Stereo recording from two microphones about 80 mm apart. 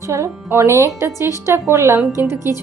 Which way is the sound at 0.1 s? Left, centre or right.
Right.